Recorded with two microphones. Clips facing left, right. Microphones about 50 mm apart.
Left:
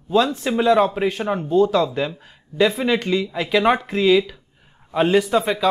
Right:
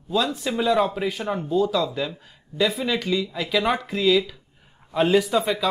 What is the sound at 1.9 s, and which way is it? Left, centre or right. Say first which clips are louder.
Speech: left 4 dB; left.